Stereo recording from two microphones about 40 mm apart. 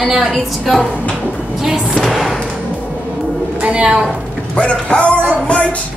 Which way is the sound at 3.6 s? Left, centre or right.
Right.